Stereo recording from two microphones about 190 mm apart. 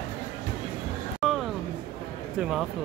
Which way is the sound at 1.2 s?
Centre (ahead or behind).